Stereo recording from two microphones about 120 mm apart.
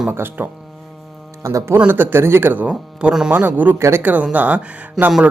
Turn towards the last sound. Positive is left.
turn(degrees=-10)  # may be behind; listen again after turning